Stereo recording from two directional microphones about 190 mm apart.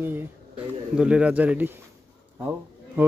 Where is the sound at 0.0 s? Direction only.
10° right (ahead or behind).